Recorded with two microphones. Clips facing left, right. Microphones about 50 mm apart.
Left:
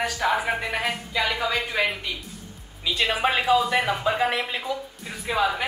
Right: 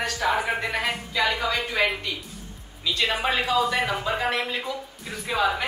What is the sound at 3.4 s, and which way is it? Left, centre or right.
Speech, centre.